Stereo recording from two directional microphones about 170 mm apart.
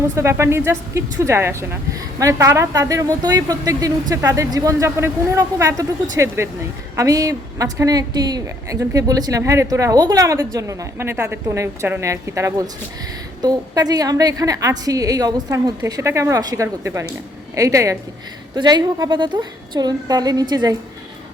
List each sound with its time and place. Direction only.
0.2 s a woman's voice: 15° right (ahead or behind)